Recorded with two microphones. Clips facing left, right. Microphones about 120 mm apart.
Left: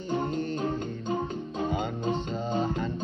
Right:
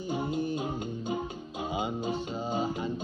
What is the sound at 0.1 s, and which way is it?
Music, 10° right (ahead or behind).